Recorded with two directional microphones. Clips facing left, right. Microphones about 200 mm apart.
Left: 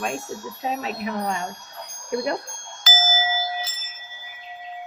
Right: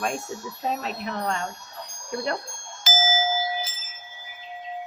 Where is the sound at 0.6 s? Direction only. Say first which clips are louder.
Left 2 dB; 5° left (ahead or behind).